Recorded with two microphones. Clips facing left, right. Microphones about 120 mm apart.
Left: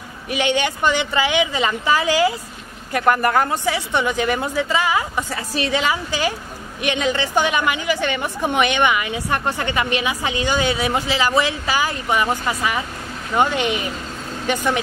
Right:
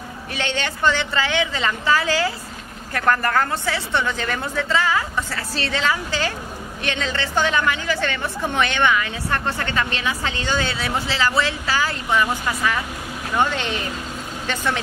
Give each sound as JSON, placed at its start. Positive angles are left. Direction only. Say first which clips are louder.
{"t": 0.3, "sound": "a woman's voice", "louder": "left 6 dB", "side_deg": 15}